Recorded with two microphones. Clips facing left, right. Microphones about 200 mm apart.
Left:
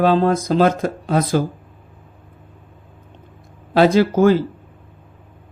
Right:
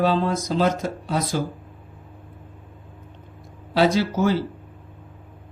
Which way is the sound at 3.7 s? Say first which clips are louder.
Left 6 dB; 55° left (ahead or behind).